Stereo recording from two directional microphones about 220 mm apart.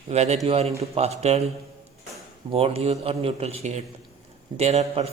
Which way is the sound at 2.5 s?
25° right (ahead or behind).